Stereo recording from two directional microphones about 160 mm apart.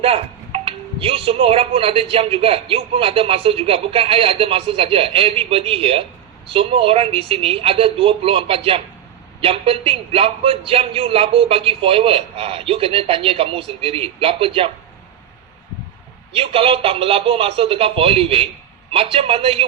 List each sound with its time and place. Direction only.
0.0 s speech: 35° right (ahead or behind)
16.3 s speech: 35° right (ahead or behind)